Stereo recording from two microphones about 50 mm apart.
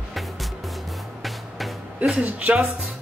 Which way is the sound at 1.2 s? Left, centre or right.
Centre.